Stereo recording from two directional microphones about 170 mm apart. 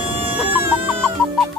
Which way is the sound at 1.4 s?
Centre (ahead or behind).